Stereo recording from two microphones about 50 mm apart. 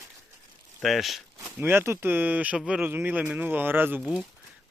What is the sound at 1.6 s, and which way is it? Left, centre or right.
Speech, right.